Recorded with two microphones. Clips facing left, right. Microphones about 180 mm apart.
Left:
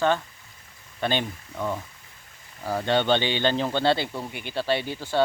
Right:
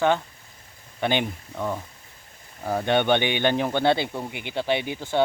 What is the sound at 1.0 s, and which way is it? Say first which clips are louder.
Speech: right 2 dB; 15° right (ahead or behind).